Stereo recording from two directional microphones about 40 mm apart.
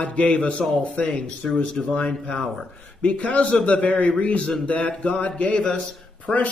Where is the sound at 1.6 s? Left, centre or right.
Centre.